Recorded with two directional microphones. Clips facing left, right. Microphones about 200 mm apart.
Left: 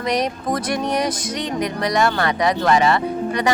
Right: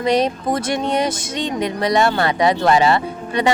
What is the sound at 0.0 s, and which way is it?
Speech, 25° right (ahead or behind).